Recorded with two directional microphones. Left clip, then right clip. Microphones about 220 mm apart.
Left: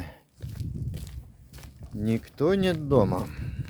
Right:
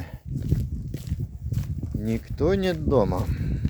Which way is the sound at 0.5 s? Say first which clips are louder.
Right 4 dB; centre (ahead or behind).